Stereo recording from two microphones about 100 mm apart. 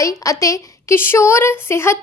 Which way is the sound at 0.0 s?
35° left (ahead or behind).